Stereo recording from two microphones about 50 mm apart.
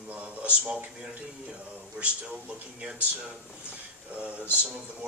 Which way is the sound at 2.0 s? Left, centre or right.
Right.